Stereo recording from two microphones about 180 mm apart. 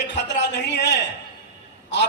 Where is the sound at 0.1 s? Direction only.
75° left (ahead or behind).